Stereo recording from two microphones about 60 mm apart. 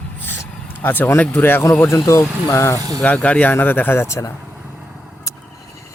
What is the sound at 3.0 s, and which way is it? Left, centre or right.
Speech, left.